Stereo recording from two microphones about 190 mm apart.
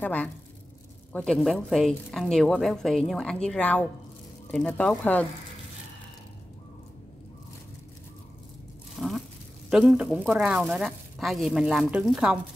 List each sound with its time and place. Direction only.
0.0 s speech: 10° left (ahead or behind)
9.0 s a sound: centre (ahead or behind)
9.7 s speech: 5° right (ahead or behind)